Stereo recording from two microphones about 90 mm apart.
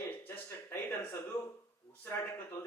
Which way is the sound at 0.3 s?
25° left (ahead or behind).